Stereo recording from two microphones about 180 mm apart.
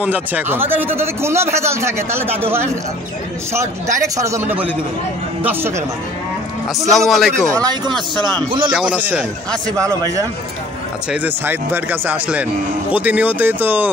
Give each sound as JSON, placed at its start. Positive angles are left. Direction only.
{"t": 0.0, "sound": "a man's voice", "side_deg": -10}
{"t": 4.0, "sound": "a man's voice", "side_deg": -15}
{"t": 6.9, "sound": "a man's voice", "side_deg": 0}
{"t": 7.5, "sound": "speech", "side_deg": -20}
{"t": 8.7, "sound": "a man's voice", "side_deg": -5}
{"t": 9.8, "sound": "speech", "side_deg": -20}
{"t": 11.1, "sound": "a man's voice", "side_deg": -10}